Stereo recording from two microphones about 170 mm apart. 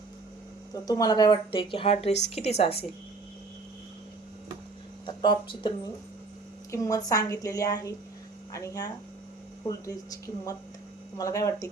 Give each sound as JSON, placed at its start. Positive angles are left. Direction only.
{"t": 0.7, "sound": "speech", "side_deg": 20}
{"t": 5.0, "sound": "a woman's voice", "side_deg": 30}